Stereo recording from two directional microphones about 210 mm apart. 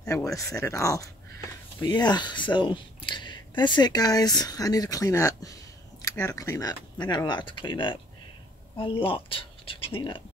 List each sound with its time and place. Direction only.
0.1 s speech: 15° left (ahead or behind)